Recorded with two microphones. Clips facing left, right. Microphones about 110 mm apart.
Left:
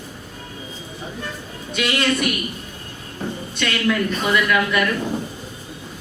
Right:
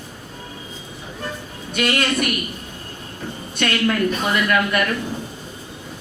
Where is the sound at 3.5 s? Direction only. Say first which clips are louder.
Right 1 dB; 50° right (ahead or behind).